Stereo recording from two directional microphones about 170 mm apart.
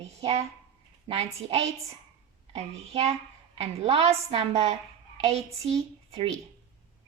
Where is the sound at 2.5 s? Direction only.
40° right (ahead or behind).